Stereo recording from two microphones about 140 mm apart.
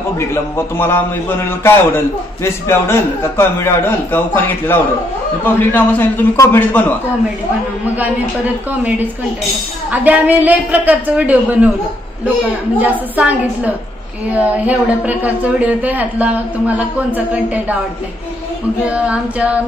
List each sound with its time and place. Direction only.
0.2 s a man's voice: 15° left (ahead or behind)
8.8 s a woman's voice: 10° right (ahead or behind)
13.1 s a woman's voice: 10° right (ahead or behind)
18.9 s a woman's voice: 10° right (ahead or behind)